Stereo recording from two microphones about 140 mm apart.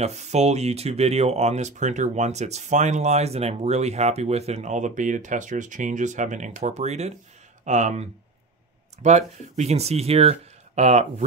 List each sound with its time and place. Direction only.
0.0 s speech: 50° right (ahead or behind)